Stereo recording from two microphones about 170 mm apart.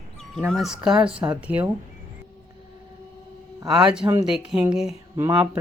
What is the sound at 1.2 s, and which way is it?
Speech, 15° right (ahead or behind).